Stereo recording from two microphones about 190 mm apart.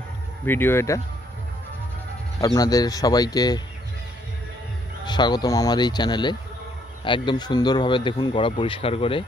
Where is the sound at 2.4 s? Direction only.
20° left (ahead or behind).